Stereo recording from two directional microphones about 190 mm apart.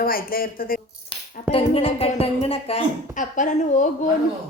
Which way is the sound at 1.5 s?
30° left (ahead or behind).